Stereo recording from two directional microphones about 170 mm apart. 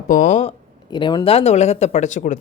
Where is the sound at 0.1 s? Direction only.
45° left (ahead or behind).